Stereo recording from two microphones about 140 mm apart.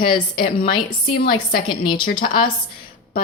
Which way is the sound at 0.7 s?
35° left (ahead or behind).